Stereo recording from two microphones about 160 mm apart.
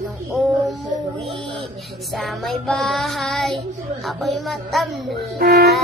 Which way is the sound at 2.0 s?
Centre (ahead or behind).